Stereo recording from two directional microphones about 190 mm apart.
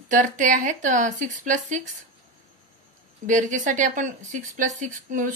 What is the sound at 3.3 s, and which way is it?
A woman's voice, 40° right (ahead or behind).